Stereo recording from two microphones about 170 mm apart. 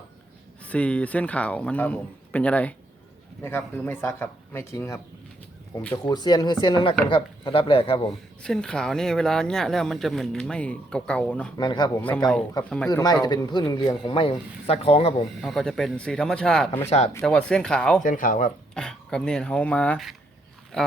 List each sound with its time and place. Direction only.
0.6 s speech: 10° left (ahead or behind)
6.1 s speech: 25° left (ahead or behind)
8.4 s speech: 5° left (ahead or behind)
11.5 s speech: 25° left (ahead or behind)
15.4 s speech: centre (ahead or behind)
18.0 s speech: 50° left (ahead or behind)
18.7 s speech: 5° left (ahead or behind)